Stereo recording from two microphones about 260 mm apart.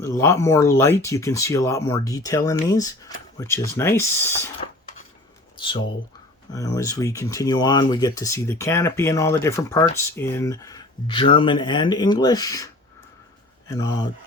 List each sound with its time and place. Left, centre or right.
0.0 s speech: centre
4.6 s a sound: left
5.5 s speech: centre
13.7 s speech: centre